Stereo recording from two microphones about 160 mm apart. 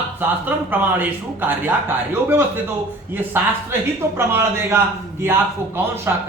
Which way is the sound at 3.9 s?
15° right (ahead or behind).